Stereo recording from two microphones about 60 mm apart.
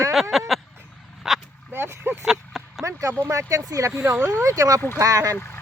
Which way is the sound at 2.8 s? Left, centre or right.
Right.